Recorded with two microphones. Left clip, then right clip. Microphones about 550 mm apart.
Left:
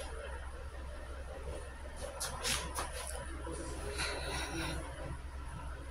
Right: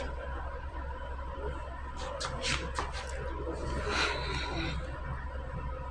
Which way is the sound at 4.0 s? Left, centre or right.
Left.